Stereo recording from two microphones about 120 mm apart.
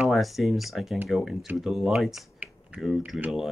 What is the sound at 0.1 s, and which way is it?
Speech, centre (ahead or behind).